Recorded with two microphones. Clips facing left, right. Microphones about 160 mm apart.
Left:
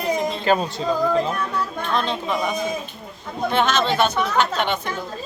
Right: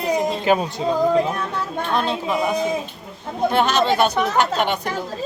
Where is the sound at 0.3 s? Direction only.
15° right (ahead or behind).